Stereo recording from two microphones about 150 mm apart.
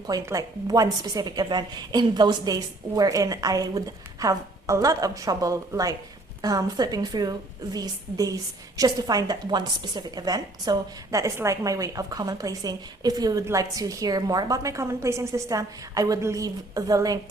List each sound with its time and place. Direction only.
0.1 s a woman's voice: 25° right (ahead or behind)